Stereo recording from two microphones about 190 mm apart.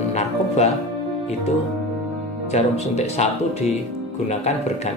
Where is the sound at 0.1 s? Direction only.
35° left (ahead or behind).